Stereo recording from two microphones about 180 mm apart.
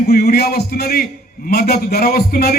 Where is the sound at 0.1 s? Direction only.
60° left (ahead or behind).